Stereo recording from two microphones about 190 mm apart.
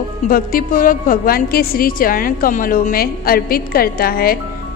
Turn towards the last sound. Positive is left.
turn(degrees=50)  # may be behind; listen again after turning